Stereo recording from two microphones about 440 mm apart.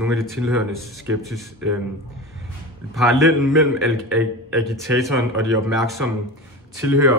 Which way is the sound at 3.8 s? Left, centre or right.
Centre.